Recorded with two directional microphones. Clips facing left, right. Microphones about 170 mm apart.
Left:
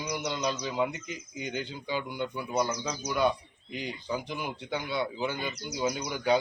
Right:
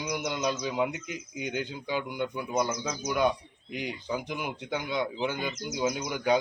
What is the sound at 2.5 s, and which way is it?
A man's voice, 5° right (ahead or behind).